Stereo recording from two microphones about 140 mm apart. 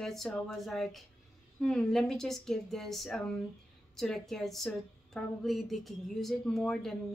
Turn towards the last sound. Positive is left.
turn(degrees=5)  # may be behind; listen again after turning